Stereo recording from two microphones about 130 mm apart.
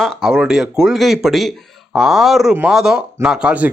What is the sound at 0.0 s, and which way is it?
Speech, centre (ahead or behind).